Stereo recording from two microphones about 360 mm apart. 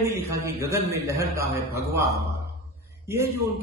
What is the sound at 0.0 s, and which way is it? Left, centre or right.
A man's voice, centre.